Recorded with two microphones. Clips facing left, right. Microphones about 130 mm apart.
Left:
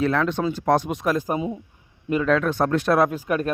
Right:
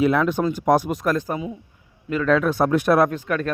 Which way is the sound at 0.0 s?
10° right (ahead or behind).